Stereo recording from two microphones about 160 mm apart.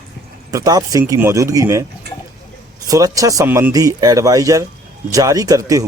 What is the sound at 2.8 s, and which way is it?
Speech, 20° right (ahead or behind).